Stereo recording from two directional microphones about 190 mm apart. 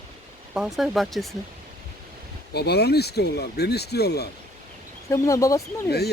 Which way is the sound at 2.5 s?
60° left (ahead or behind).